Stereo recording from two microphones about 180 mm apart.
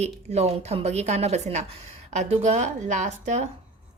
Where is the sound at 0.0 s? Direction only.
35° right (ahead or behind).